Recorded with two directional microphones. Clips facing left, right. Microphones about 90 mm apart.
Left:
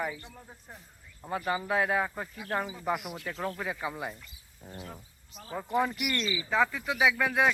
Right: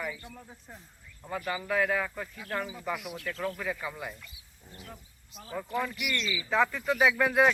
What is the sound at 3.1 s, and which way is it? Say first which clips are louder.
Speech: even; 20° left (ahead or behind).